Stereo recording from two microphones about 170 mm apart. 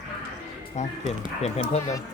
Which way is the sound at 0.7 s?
40° left (ahead or behind).